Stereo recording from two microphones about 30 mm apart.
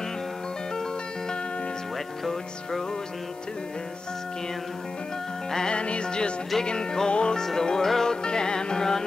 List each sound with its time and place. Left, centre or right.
5.7 s music: left
7.1 s music: left
7.3 s music: centre
8.2 s music: left